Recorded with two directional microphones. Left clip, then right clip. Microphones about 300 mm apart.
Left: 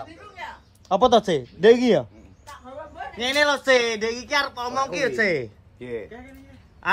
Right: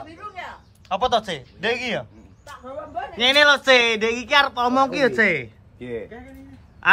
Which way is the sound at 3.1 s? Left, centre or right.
Centre.